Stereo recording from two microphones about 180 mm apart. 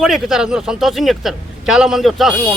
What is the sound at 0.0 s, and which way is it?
Speech, centre (ahead or behind).